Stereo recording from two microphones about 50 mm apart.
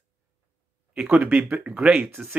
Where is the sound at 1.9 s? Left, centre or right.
Right.